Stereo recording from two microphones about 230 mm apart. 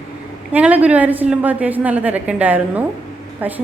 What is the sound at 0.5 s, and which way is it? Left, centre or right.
A woman's voice, centre.